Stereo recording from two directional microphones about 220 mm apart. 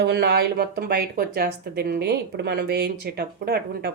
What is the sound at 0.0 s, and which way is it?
Speech, 50° right (ahead or behind).